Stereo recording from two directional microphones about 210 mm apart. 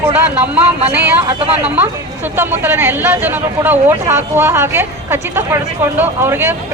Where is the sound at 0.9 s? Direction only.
10° right (ahead or behind).